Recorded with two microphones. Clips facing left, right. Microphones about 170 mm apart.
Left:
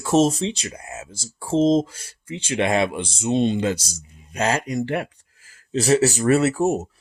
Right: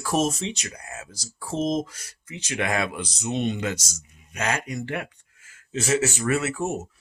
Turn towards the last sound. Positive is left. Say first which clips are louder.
# left 7 dB
turn(degrees=40)  # may be behind; listen again after turning